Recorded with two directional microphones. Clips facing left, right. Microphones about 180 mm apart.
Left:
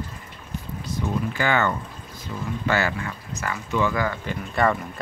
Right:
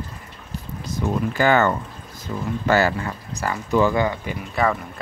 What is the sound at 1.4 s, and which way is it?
Speech, 40° right (ahead or behind).